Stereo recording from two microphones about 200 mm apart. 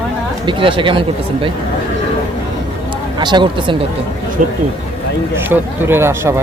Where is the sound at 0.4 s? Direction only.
25° right (ahead or behind).